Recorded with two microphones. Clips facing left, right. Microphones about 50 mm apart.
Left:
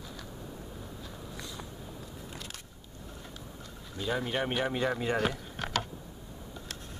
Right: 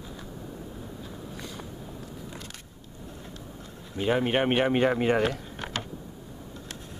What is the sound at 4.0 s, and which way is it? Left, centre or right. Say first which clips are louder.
Speech: right 7 dB; right.